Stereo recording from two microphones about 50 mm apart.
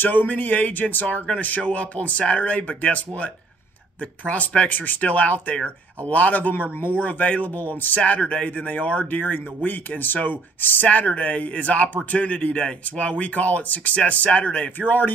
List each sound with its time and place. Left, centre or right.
0.0 s speech: left
4.3 s speech: left
8.0 s speech: left
12.5 s speech: left
14.8 s speech: left